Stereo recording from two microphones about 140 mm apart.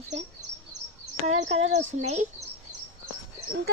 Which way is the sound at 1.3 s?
55° right (ahead or behind).